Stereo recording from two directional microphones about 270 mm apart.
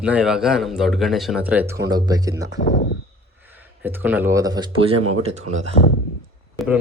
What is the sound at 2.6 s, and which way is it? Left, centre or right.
Speech, left.